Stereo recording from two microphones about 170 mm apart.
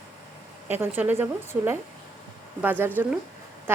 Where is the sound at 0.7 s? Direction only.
10° right (ahead or behind).